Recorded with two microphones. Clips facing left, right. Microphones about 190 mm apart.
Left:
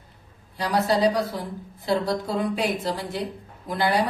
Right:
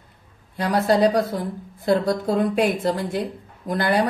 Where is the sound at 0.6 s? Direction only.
55° right (ahead or behind).